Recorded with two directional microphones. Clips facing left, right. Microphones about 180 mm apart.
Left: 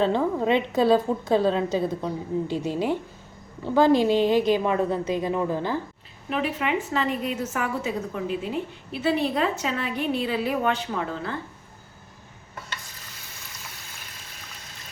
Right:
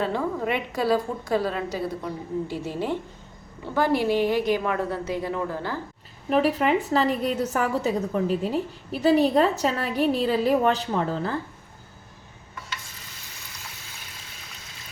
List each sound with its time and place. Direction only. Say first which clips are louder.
0.0 s a woman's voice: left 4 dB; 25° left (ahead or behind)
6.3 s a woman's voice: right 5 dB; 40° right (ahead or behind)